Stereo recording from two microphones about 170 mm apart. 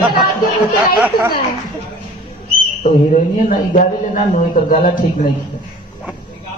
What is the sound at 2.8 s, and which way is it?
A man's voice, 45° left (ahead or behind).